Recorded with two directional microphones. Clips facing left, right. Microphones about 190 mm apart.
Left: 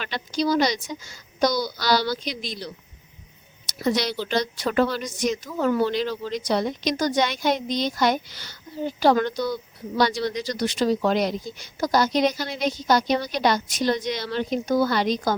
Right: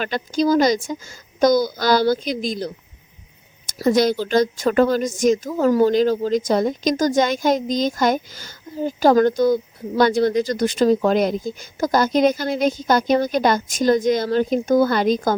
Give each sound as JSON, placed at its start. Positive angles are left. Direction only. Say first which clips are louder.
{"t": 0.0, "sound": "a woman's voice", "louder": "right 6 dB", "side_deg": -45}
{"t": 3.8, "sound": "a woman's voice", "louder": "right 7 dB", "side_deg": -45}